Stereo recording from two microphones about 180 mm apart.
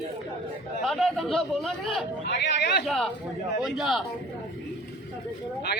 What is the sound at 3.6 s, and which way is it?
Speech, centre (ahead or behind).